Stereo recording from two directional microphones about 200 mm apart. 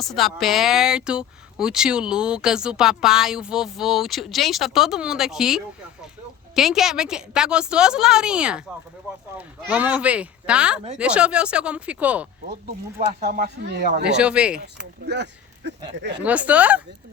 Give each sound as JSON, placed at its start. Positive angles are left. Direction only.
{"t": 0.0, "sound": "speech", "side_deg": 0}
{"t": 13.1, "sound": "speech", "side_deg": -45}
{"t": 14.2, "sound": "speech", "side_deg": -5}
{"t": 15.0, "sound": "speech", "side_deg": -55}
{"t": 16.2, "sound": "speech", "side_deg": -5}